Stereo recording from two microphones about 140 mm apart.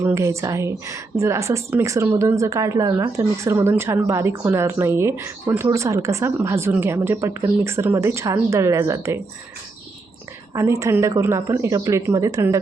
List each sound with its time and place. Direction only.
0.0 s a woman's voice: 20° right (ahead or behind)
10.5 s a woman's voice: 20° right (ahead or behind)